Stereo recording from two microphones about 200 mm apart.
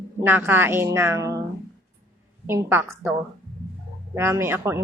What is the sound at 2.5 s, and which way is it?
A woman's voice, 10° right (ahead or behind).